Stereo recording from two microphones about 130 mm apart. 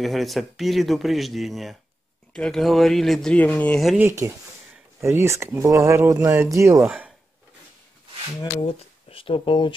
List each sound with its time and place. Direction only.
0.0 s speech: centre (ahead or behind)
4.2 s speech: 25° right (ahead or behind)
8.4 s speech: 40° left (ahead or behind)